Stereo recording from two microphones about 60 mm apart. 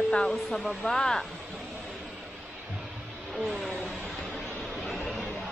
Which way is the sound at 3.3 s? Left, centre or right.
Centre.